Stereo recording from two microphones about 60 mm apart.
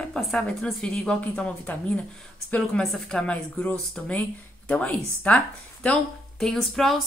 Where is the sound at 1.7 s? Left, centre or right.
Left.